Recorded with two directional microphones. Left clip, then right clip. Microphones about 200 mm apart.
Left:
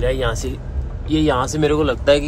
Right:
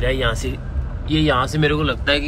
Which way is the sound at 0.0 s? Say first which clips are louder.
Even; 25° left (ahead or behind).